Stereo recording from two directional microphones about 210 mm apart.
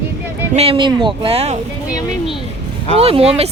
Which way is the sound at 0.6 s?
25° right (ahead or behind).